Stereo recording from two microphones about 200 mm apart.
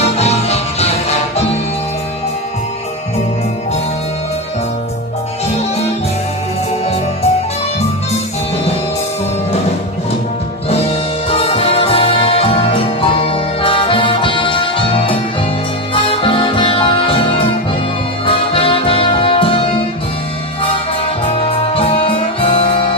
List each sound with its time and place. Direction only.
0.0 s music: 30° left (ahead or behind)
6.8 s music: 30° left (ahead or behind)
11.3 s music: 30° left (ahead or behind)
21.5 s music: 30° left (ahead or behind)